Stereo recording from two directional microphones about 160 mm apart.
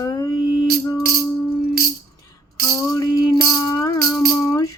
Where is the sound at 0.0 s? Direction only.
25° left (ahead or behind).